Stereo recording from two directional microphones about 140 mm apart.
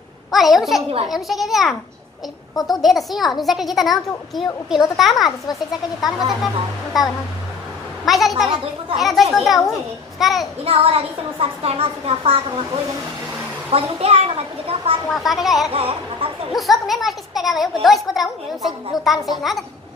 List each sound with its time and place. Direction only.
0.3 s a child's voice: centre (ahead or behind)
5.5 s speech: 25° left (ahead or behind)
6.4 s a child's voice: centre (ahead or behind)
10.6 s a child's voice: 45° right (ahead or behind)
13.7 s a child's voice: 45° right (ahead or behind)
15.0 s a child's voice: centre (ahead or behind)
15.7 s speech: 40° right (ahead or behind)
16.5 s a child's voice: centre (ahead or behind)